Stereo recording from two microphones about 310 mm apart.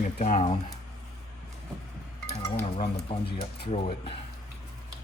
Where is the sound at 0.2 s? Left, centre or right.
Left.